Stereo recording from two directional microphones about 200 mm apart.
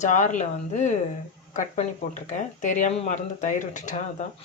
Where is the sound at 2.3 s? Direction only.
40° left (ahead or behind).